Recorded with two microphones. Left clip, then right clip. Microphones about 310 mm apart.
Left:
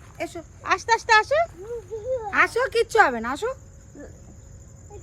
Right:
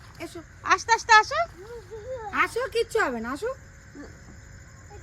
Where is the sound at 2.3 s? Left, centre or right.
Centre.